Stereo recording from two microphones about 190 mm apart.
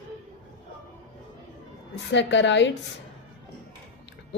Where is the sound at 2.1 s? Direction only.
70° left (ahead or behind).